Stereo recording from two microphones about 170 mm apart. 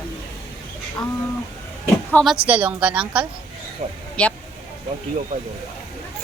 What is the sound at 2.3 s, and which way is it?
Speech, 10° right (ahead or behind).